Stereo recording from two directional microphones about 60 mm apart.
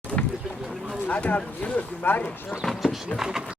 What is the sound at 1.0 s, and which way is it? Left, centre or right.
Speech, left.